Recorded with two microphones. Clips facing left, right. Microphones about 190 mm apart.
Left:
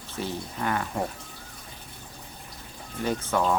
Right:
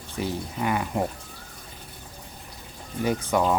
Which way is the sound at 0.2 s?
10° right (ahead or behind).